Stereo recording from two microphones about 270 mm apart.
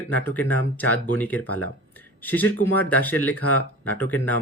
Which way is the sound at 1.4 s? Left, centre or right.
Left.